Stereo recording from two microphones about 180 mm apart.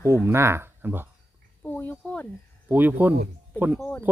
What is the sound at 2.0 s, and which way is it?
Speech, 5° left (ahead or behind).